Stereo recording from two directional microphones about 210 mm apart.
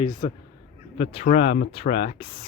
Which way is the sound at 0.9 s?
30° left (ahead or behind).